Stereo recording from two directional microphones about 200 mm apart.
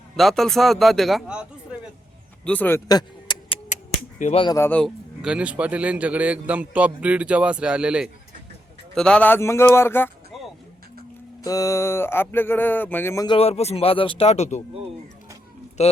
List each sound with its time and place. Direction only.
0.2 s speech: centre (ahead or behind)
2.4 s vehicle: 5° left (ahead or behind)
4.2 s speech: 35° left (ahead or behind)
4.4 s a sound: 15° left (ahead or behind)
5.2 s a man's voice: 5° right (ahead or behind)
9.0 s a sound: 5° left (ahead or behind)
11.4 s a sound: 15° left (ahead or behind)
13.2 s speech: 30° left (ahead or behind)
15.8 s speech: 35° left (ahead or behind)